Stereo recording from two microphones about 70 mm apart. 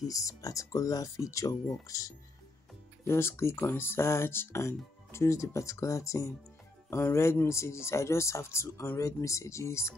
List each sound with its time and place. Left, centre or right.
0.1 s speech: left
3.1 s speech: left